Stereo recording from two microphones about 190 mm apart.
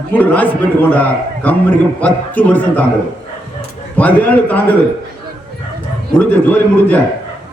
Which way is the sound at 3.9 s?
10° left (ahead or behind).